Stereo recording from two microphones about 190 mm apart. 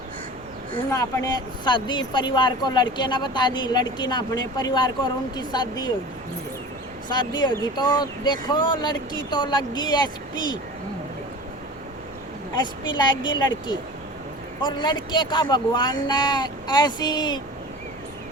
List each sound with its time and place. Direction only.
0.9 s speech: 15° left (ahead or behind)
7.1 s speech: 25° left (ahead or behind)
13.0 s speech: 25° left (ahead or behind)
14.6 s speech: 25° left (ahead or behind)